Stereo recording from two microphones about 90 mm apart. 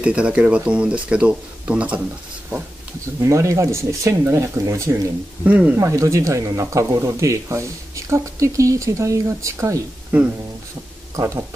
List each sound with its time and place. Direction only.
0.0 s speech: 10° right (ahead or behind)
3.2 s speech: 35° right (ahead or behind)
5.4 s speech: 15° right (ahead or behind)
5.8 s speech: 35° right (ahead or behind)
11.1 s speech: 35° right (ahead or behind)